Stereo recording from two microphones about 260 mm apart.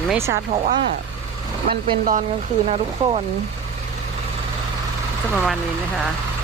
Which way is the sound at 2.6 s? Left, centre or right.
Right.